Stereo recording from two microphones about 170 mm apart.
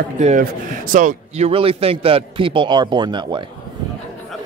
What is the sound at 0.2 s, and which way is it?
A man's voice, 45° right (ahead or behind).